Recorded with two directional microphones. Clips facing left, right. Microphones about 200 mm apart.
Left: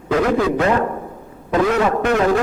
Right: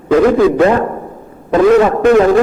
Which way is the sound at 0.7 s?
45° right (ahead or behind).